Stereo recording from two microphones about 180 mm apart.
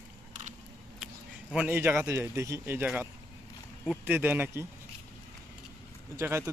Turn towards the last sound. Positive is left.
turn(degrees=-15)  # may be behind; listen again after turning